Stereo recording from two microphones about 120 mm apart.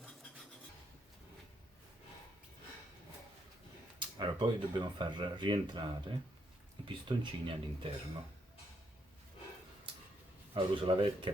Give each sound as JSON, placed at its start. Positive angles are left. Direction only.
{"t": 4.2, "sound": "speech", "side_deg": -40}
{"t": 10.5, "sound": "speech", "side_deg": -45}